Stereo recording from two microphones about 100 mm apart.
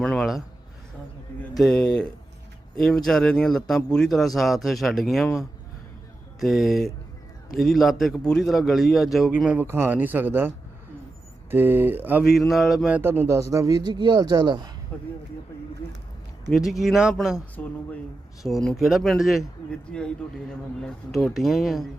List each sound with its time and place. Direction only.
0.0 s a sound: 10° left (ahead or behind)
1.5 s speech: 5° left (ahead or behind)
6.4 s speech: centre (ahead or behind)
9.6 s speech: 25° right (ahead or behind)
11.5 s speech: 20° right (ahead or behind)
12.3 s speech: centre (ahead or behind)
12.9 s a man's voice: 20° right (ahead or behind); by 14.7 s 45° right (ahead or behind)
14.9 s speech: 15° left (ahead or behind)
16.5 s speech: centre (ahead or behind)
18.4 s speech: centre (ahead or behind)
20.5 s speech: 5° left (ahead or behind)